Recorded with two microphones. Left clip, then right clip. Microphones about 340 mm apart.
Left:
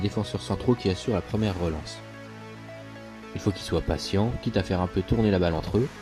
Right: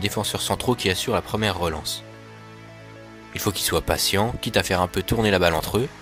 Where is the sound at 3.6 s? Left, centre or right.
Right.